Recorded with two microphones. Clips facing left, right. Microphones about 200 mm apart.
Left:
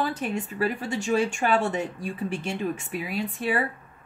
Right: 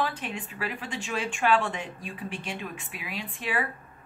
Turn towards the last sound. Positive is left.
turn(degrees=40)  # may be behind; listen again after turning